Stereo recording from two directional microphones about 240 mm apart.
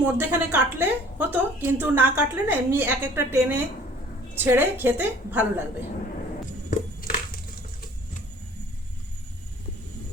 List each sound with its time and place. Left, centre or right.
0.0 s a woman's voice: centre
6.7 s music: left